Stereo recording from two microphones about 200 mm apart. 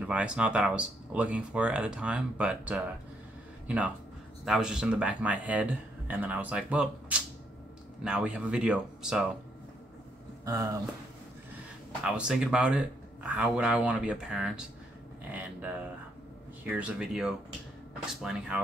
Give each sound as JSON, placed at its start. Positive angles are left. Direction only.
{"t": 0.0, "sound": "speech", "side_deg": -5}
{"t": 10.4, "sound": "speech", "side_deg": -15}
{"t": 12.0, "sound": "speech", "side_deg": -5}
{"t": 16.6, "sound": "speech", "side_deg": -5}